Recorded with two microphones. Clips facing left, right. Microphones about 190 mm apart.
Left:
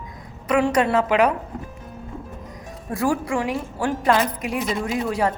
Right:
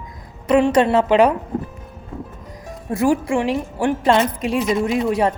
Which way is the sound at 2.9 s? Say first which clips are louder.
Right 5 dB; 25° right (ahead or behind).